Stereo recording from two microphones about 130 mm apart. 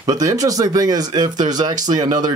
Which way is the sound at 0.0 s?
25° right (ahead or behind).